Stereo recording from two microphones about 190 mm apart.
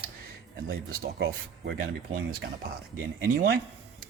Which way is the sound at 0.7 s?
65° right (ahead or behind).